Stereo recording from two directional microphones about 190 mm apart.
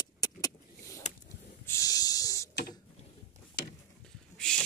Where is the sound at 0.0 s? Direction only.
20° left (ahead or behind).